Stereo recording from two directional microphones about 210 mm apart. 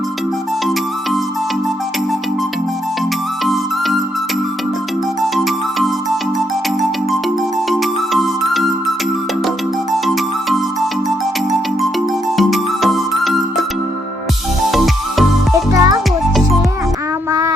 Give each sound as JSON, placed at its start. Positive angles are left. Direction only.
{"t": 3.4, "sound": "music", "side_deg": 0}
{"t": 7.7, "sound": "music", "side_deg": 0}
{"t": 12.4, "sound": "music", "side_deg": 0}
{"t": 15.5, "sound": "music", "side_deg": -15}